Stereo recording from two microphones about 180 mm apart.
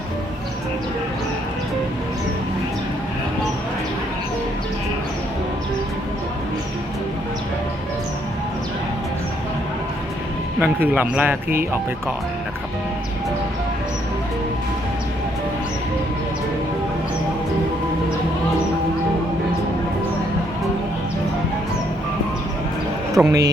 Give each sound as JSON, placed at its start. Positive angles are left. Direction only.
{"t": 10.6, "sound": "a man's voice", "side_deg": -10}
{"t": 23.1, "sound": "speech", "side_deg": -20}